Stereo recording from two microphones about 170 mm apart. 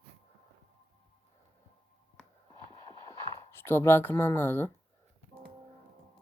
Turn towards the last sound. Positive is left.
turn(degrees=10)  # may be behind; listen again after turning